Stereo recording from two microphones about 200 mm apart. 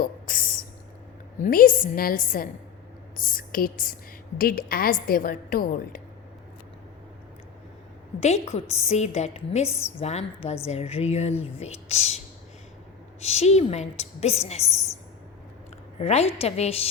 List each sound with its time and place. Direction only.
0.0 s a sound: 45° left (ahead or behind)
1.4 s a woman's voice: 45° left (ahead or behind)
8.2 s speech: 35° left (ahead or behind)
9.6 s a woman's voice: 15° left (ahead or behind)
10.0 s speech: 30° left (ahead or behind)
16.0 s speech: 30° left (ahead or behind)